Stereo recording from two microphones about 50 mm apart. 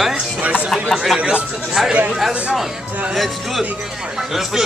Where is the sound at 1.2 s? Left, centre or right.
Right.